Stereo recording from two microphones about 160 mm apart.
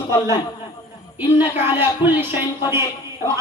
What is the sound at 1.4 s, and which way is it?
Speech, 10° right (ahead or behind).